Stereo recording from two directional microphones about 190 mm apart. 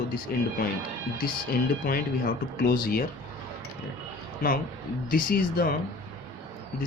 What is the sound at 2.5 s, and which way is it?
Speech, 50° left (ahead or behind).